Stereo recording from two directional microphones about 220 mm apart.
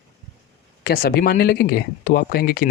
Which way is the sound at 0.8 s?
45° left (ahead or behind).